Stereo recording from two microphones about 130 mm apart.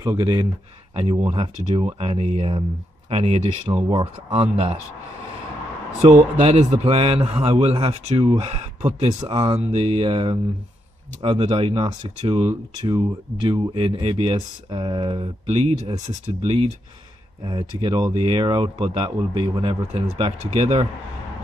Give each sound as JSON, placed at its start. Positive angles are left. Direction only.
{"t": 0.0, "sound": "speech", "side_deg": -35}
{"t": 2.0, "sound": "speech", "side_deg": -50}
{"t": 5.9, "sound": "speech", "side_deg": -60}
{"t": 8.8, "sound": "speech", "side_deg": -35}
{"t": 9.6, "sound": "speech", "side_deg": -45}
{"t": 17.5, "sound": "speech", "side_deg": -35}